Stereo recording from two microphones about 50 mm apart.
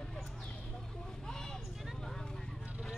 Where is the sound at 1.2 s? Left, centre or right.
Centre.